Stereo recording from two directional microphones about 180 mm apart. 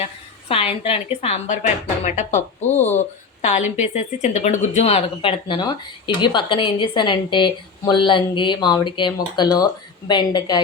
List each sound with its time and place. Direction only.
0.0 s a woman's voice: 35° left (ahead or behind)